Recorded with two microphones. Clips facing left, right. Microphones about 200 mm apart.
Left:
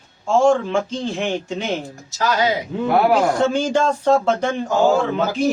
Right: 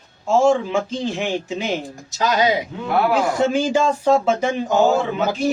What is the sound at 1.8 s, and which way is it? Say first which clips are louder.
A man's voice: even; 15° right (ahead or behind).